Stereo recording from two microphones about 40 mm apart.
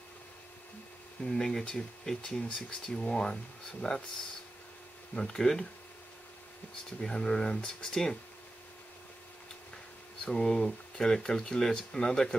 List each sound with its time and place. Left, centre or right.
1.2 s speech: centre
3.8 s speech: left
5.1 s speech: centre
7.0 s speech: centre
10.2 s speech: centre